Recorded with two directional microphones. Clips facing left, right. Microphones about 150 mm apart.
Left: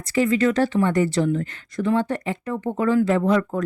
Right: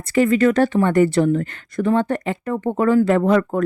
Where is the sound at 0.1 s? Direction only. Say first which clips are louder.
Right 4 dB; 55° right (ahead or behind).